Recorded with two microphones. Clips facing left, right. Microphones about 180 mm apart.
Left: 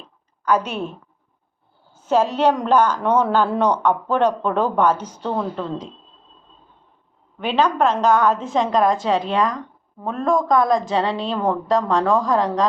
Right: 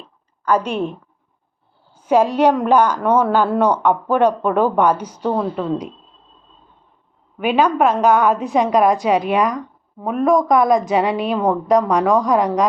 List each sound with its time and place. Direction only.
0.4 s a woman's voice: 10° right (ahead or behind)
7.3 s a woman's voice: 10° right (ahead or behind)